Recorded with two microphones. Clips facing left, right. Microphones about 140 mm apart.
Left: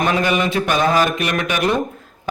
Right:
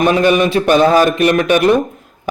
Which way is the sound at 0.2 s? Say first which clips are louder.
Right 6 dB; 25° right (ahead or behind).